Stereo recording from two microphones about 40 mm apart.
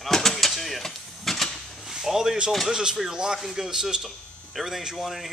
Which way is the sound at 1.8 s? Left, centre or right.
Centre.